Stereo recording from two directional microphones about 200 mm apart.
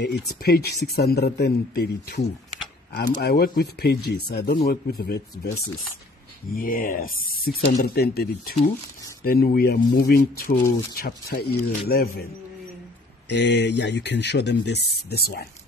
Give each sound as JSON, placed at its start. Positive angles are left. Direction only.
{"t": 0.0, "sound": "speech", "side_deg": 55}
{"t": 6.5, "sound": "speech", "side_deg": 45}
{"t": 13.3, "sound": "speech", "side_deg": 60}